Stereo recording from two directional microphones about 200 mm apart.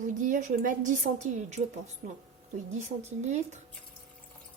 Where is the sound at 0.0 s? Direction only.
40° right (ahead or behind).